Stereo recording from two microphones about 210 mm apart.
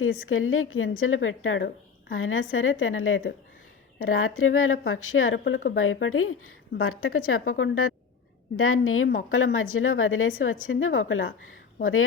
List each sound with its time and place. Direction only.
0.3 s a woman's voice: 80° left
3.9 s a woman's voice: 80° left
9.1 s a woman's voice: 75° left (ahead or behind)